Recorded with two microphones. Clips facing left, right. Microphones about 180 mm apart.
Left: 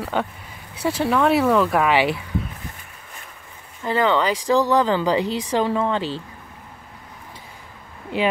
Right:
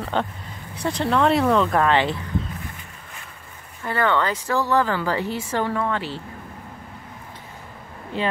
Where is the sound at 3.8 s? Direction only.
15° left (ahead or behind).